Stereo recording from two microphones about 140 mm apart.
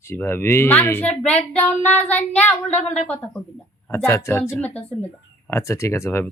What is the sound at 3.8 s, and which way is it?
A woman's voice, 20° left (ahead or behind).